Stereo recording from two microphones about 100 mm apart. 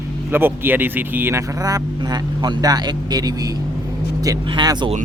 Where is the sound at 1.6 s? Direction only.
40° right (ahead or behind).